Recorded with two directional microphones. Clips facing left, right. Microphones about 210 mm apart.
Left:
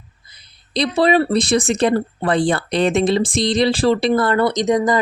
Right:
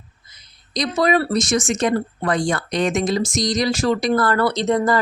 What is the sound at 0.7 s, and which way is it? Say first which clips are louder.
Speech: left 3 dB; 30° left (ahead or behind).